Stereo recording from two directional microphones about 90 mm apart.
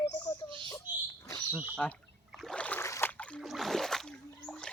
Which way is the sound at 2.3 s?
5° left (ahead or behind).